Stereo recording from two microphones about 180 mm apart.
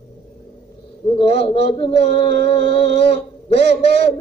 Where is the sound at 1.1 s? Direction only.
35° left (ahead or behind).